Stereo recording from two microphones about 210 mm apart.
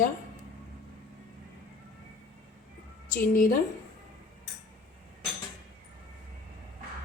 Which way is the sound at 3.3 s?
40° left (ahead or behind).